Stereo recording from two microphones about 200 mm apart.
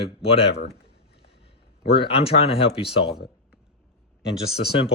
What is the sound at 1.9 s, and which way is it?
Speech, 25° left (ahead or behind).